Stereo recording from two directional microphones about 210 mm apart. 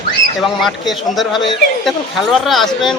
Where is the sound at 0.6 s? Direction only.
Centre (ahead or behind).